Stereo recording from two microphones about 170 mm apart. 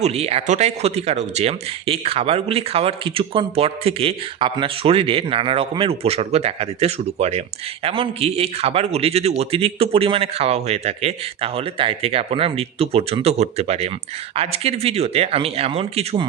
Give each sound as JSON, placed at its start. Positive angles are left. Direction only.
{"t": 0.0, "sound": "speech", "side_deg": -35}